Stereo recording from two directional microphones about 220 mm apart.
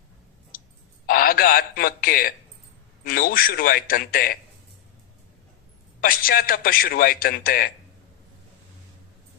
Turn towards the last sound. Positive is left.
turn(degrees=40)  # may be behind; listen again after turning